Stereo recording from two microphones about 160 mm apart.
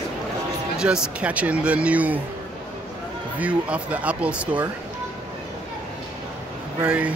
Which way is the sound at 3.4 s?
10° right (ahead or behind).